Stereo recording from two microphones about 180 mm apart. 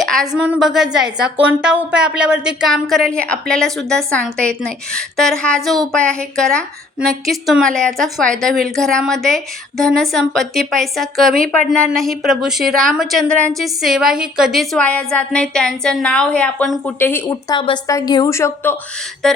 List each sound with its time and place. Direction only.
0.0 s a sound: centre (ahead or behind)
0.3 s a woman's voice: 5° right (ahead or behind); by 17.3 s 10° left (ahead or behind)
17.5 s a woman's voice: 25° left (ahead or behind)
19.2 s a woman's voice: centre (ahead or behind)